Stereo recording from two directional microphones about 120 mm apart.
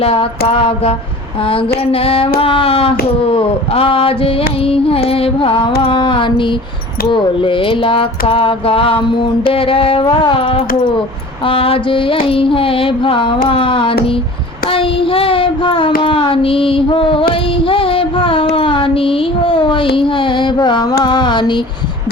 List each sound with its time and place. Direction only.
0.0 s child singing: 55° left (ahead or behind)